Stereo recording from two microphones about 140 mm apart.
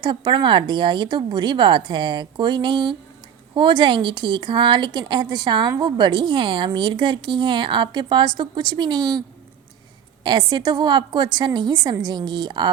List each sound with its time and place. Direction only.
0.0 s a woman's voice: 35° right (ahead or behind)
10.2 s a woman's voice: 30° right (ahead or behind)